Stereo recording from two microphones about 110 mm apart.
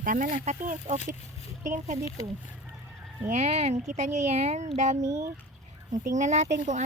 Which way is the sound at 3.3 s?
85° right.